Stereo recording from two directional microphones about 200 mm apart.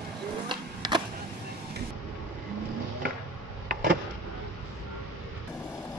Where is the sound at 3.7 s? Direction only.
45° right (ahead or behind).